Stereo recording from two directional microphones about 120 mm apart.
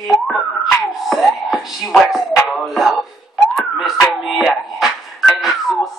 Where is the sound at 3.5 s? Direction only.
5° right (ahead or behind).